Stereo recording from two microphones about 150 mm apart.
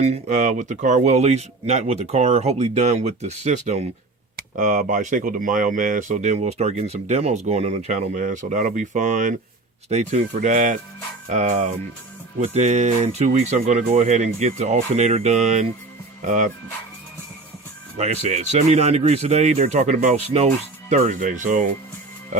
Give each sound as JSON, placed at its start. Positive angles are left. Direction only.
{"t": 0.0, "sound": "speech", "side_deg": -50}
{"t": 4.4, "sound": "speech", "side_deg": -60}
{"t": 17.9, "sound": "speech", "side_deg": -45}
{"t": 20.9, "sound": "speech", "side_deg": -60}